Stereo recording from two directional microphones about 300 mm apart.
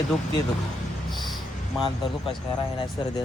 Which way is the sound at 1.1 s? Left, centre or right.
Centre.